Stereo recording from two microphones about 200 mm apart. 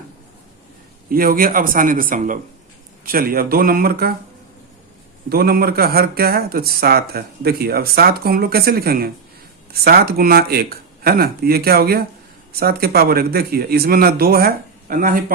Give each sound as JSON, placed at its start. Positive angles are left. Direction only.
{"t": 1.1, "sound": "speech", "side_deg": -45}
{"t": 5.3, "sound": "speech", "side_deg": -50}